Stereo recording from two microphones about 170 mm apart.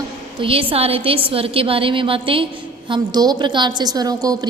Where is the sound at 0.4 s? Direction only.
35° right (ahead or behind).